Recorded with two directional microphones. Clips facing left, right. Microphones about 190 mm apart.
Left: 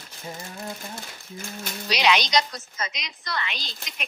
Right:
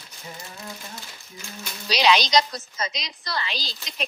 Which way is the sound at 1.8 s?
35° right (ahead or behind).